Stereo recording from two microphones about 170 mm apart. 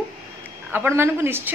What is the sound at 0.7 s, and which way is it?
Speech, 15° right (ahead or behind).